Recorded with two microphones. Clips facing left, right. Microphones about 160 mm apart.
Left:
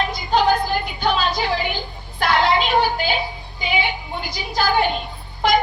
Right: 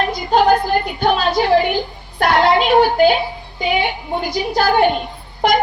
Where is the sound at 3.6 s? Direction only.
50° right (ahead or behind).